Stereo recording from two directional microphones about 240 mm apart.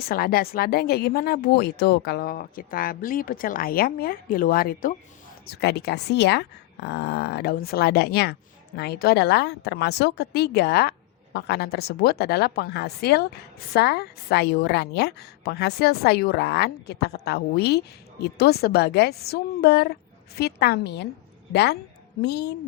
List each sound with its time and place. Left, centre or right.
0.1 s a woman's voice: left